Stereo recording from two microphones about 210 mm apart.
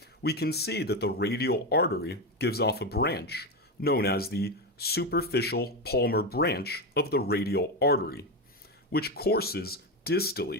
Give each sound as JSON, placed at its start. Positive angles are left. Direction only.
{"t": 0.0, "sound": "speech", "side_deg": 50}